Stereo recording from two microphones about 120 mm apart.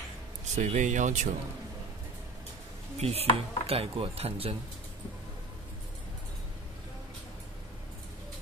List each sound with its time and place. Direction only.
0.6 s speech: 80° right
3.0 s speech: 60° right (ahead or behind)